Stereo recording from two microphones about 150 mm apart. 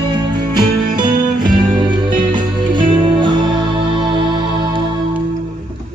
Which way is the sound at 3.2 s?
35° right (ahead or behind).